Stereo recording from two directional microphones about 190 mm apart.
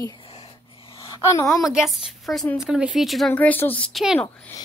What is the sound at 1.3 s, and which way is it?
Speech, 15° left (ahead or behind).